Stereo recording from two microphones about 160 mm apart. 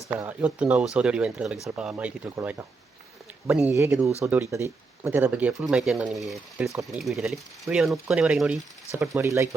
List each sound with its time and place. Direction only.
0.3 s speech: 10° right (ahead or behind)
8.9 s speech: 15° right (ahead or behind)